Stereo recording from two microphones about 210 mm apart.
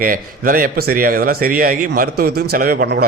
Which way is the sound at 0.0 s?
40° right (ahead or behind).